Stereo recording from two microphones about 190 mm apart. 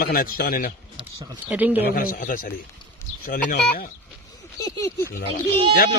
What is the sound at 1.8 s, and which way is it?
Speech, 50° left (ahead or behind).